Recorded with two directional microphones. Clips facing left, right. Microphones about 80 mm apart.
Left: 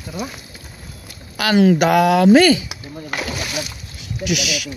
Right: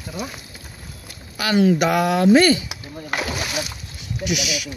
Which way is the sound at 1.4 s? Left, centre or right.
Left.